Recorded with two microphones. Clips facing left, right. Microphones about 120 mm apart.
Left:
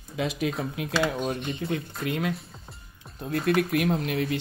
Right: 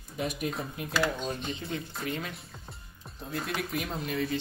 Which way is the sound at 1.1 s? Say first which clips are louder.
Left 5 dB; 60° left (ahead or behind).